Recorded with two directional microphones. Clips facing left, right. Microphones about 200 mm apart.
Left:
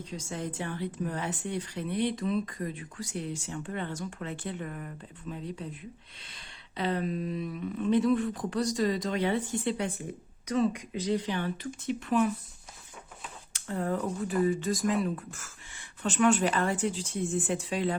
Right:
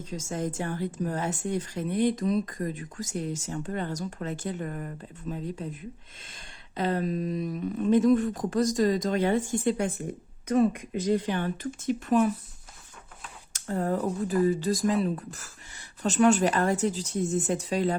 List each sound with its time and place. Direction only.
0.0 s a woman's voice: 45° right (ahead or behind)
13.5 s speech: 40° right (ahead or behind)